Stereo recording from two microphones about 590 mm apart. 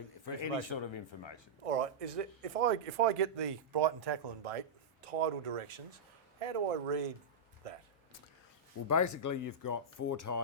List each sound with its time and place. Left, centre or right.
0.3 s speech: left
1.6 s speech: right
3.2 s speech: right
5.0 s speech: right
8.9 s speech: left